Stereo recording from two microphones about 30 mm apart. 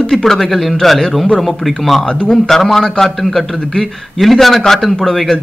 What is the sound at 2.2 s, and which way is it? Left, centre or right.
Speech, left.